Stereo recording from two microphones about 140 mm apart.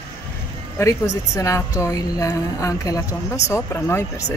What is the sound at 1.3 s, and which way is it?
Speech, 20° left (ahead or behind).